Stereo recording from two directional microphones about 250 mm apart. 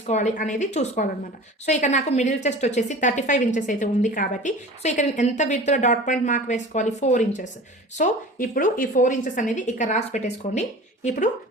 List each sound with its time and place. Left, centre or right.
0.0 s a woman's voice: left